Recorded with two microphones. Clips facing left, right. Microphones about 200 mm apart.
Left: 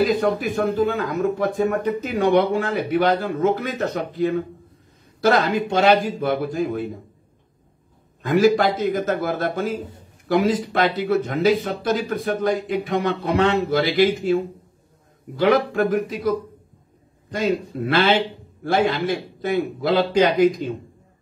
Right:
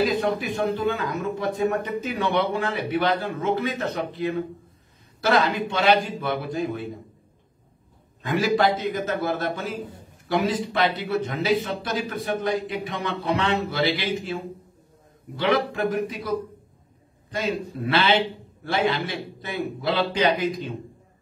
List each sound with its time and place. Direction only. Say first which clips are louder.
0.1 s a man's voice: left 4 dB; 45° left (ahead or behind)
8.2 s a man's voice: left 5 dB; 45° left (ahead or behind)